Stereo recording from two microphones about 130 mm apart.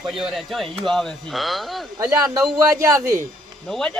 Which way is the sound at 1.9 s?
30° right (ahead or behind).